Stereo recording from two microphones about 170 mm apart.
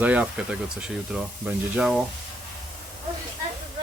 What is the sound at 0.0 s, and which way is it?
Speech, 10° right (ahead or behind).